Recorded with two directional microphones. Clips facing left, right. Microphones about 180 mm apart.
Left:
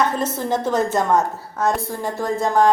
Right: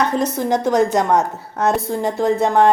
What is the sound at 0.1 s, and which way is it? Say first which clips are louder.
A woman's voice: right 4 dB; 15° right (ahead or behind).